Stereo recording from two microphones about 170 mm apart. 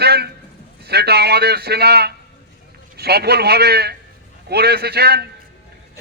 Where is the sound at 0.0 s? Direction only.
70° right (ahead or behind).